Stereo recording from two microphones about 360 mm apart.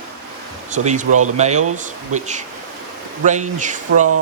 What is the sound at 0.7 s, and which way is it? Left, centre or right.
Speech, centre.